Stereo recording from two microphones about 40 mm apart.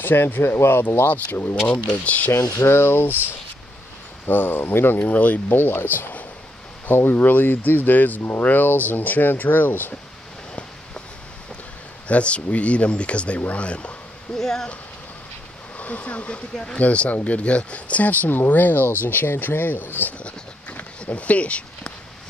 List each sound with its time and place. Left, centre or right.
0.0 s speech: left
1.1 s speech: left
1.7 s speech: left
2.3 s speech: left
4.3 s speech: left
4.9 s speech: left
5.6 s speech: left
8.2 s speech: left
8.5 s speech: left
12.1 s speech: left
14.3 s speech: centre
15.8 s speech: left
21.0 s speech: left